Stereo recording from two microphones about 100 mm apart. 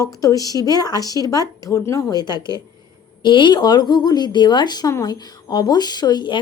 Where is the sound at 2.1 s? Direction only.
45° left (ahead or behind).